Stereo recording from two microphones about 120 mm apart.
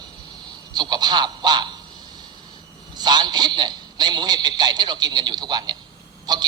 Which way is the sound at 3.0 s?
35° right (ahead or behind).